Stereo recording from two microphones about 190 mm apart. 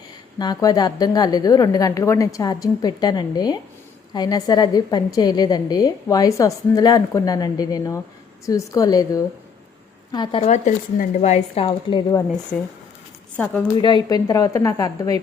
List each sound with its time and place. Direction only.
0.3 s a woman's voice: 20° left (ahead or behind)
10.4 s speech: 40° left (ahead or behind); by 12.2 s 25° left (ahead or behind)
13.3 s speech: 5° left (ahead or behind)
13.7 s a woman's voice: 25° left (ahead or behind)